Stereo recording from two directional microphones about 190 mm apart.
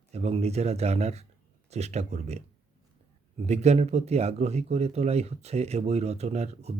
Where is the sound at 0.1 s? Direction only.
35° right (ahead or behind).